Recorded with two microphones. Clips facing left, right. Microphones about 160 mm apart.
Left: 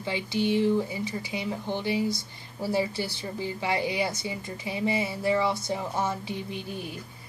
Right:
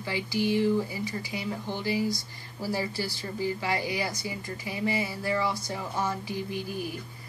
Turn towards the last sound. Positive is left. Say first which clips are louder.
# right 2 dB
turn(degrees=25)  # may be behind; listen again after turning